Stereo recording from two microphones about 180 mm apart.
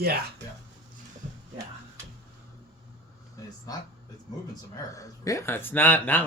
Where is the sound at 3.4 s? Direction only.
20° left (ahead or behind).